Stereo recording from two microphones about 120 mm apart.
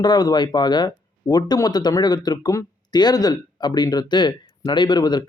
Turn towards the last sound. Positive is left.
turn(degrees=35)  # may be behind; listen again after turning